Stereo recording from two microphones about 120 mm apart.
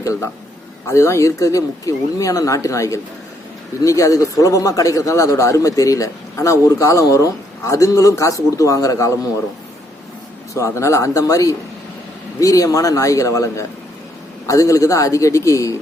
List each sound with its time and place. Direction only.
0.0 s a man's voice: 25° left (ahead or behind)
10.5 s speech: 25° left (ahead or behind)